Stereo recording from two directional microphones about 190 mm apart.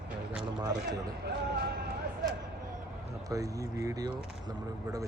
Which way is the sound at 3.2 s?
15° right (ahead or behind).